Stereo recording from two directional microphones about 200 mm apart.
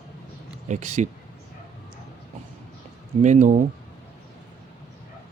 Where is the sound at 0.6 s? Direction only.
35° right (ahead or behind).